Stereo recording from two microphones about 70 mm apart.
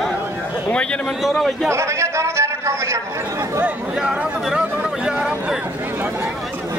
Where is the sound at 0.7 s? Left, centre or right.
Centre.